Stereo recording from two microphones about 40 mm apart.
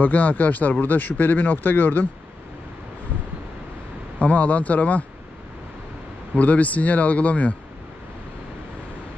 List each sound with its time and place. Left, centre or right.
0.0 s speech: left
4.2 s speech: left
6.3 s speech: left